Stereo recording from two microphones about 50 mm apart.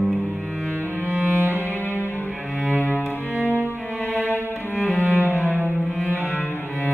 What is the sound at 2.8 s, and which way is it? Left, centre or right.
Cello, left.